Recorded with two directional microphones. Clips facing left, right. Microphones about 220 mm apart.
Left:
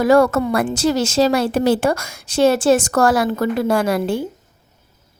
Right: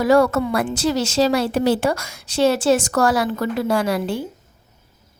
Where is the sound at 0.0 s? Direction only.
50° left (ahead or behind).